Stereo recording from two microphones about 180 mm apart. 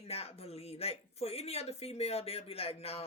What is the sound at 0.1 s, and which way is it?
Speech, 35° left (ahead or behind).